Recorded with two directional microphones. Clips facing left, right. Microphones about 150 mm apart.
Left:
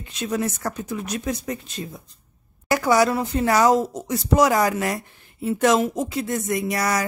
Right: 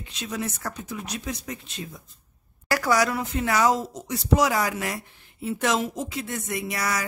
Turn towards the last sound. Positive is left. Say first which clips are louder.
# left 5 dB
turn(degrees=40)  # may be behind; listen again after turning